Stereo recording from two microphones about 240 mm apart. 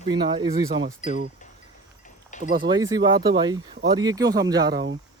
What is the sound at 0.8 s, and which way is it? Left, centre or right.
Speech, right.